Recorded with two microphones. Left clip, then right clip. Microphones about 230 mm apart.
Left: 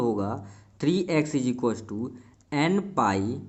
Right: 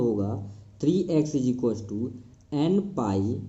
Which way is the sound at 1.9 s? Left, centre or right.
Left.